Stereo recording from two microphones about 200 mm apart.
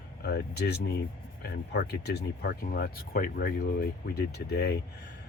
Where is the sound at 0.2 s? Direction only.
55° left (ahead or behind).